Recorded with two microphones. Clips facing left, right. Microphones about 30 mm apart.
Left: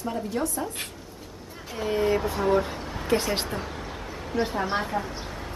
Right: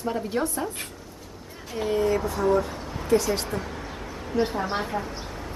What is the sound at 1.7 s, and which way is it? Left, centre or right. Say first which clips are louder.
Speech: right 2 dB; centre.